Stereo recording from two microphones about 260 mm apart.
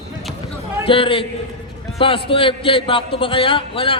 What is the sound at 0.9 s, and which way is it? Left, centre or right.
A man's voice, centre.